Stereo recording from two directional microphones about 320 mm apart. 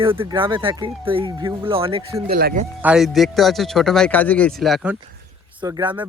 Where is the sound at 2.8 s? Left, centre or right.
Centre.